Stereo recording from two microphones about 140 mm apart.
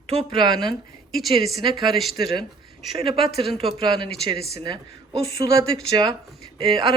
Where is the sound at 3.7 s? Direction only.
35° right (ahead or behind).